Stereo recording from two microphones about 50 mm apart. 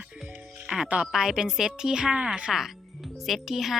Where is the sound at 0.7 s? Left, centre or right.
Right.